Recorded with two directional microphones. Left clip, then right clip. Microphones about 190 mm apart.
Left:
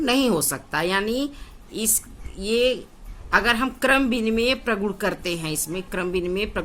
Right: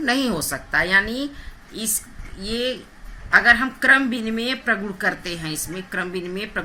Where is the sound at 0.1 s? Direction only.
55° left (ahead or behind).